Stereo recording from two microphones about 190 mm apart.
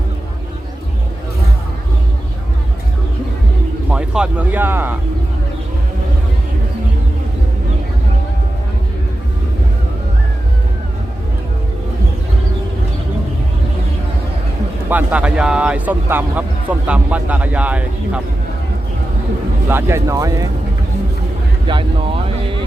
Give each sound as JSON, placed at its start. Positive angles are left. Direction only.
{"t": 3.9, "sound": "speech", "side_deg": -5}
{"t": 14.8, "sound": "speech", "side_deg": -10}
{"t": 19.6, "sound": "speech", "side_deg": -15}
{"t": 21.7, "sound": "speech", "side_deg": -25}